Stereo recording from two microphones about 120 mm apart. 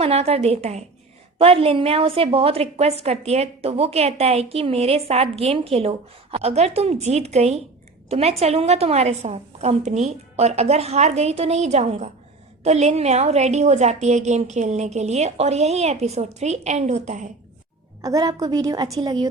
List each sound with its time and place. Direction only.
0.0 s a woman's voice: 60° right (ahead or behind); by 17.3 s 85° right
18.0 s a woman's voice: 30° right (ahead or behind)